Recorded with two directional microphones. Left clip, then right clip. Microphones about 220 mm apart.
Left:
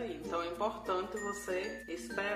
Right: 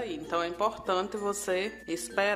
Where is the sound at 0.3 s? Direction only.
40° right (ahead or behind).